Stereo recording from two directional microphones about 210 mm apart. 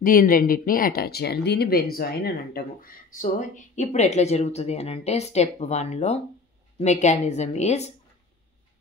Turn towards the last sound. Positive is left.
turn(degrees=30)  # may be behind; listen again after turning